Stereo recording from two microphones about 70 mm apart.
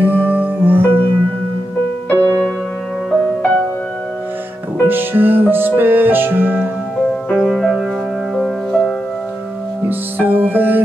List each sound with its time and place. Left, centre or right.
0.0 s music: right
2.0 s music: left
4.8 s music: right
7.2 s music: centre
9.8 s music: right